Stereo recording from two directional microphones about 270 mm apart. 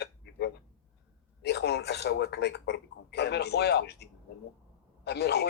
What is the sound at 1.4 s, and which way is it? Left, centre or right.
Speech, left.